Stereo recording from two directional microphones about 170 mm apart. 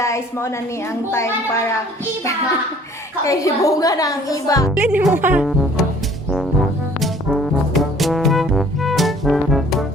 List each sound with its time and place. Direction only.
0.0 s a woman's voice: 15° left (ahead or behind)
3.2 s a woman's voice: 20° left (ahead or behind)
4.7 s speech: 10° right (ahead or behind)
7.0 s trombone: centre (ahead or behind)